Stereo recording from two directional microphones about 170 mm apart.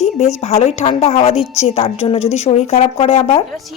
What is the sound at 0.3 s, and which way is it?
Speech, 40° left (ahead or behind).